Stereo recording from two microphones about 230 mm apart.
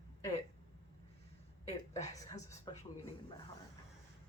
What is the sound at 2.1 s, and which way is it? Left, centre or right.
Speech, centre.